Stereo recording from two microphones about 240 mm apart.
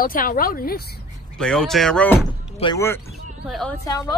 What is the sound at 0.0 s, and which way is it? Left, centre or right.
Speech, left.